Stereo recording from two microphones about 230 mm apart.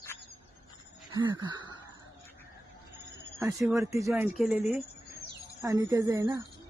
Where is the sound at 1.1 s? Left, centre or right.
Centre.